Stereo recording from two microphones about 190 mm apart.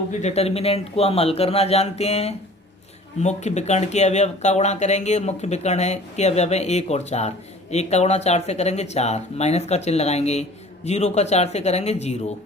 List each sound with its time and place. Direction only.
0.1 s speech: 35° left (ahead or behind)